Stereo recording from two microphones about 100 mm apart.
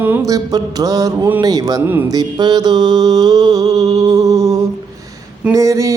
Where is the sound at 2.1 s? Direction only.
40° right (ahead or behind).